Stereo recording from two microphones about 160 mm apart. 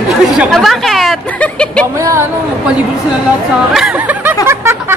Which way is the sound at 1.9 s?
20° right (ahead or behind).